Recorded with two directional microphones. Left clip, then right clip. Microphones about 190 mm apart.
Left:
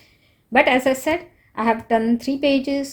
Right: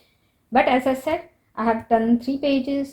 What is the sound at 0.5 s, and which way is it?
A woman's voice, 40° left (ahead or behind).